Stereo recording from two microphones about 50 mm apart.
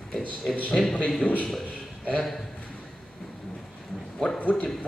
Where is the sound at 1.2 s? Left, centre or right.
Left.